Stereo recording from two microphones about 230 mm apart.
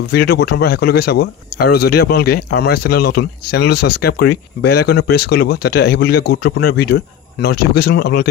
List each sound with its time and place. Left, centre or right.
0.1 s speech: left